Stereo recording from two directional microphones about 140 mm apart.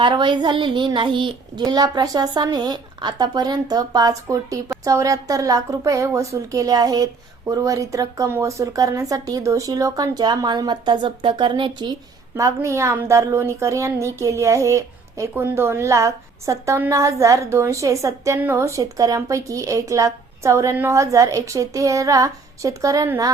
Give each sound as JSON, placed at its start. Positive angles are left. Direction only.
{"t": 0.0, "sound": "child singing", "side_deg": -35}
{"t": 4.8, "sound": "a woman's voice", "side_deg": -25}
{"t": 12.4, "sound": "a woman's voice", "side_deg": -20}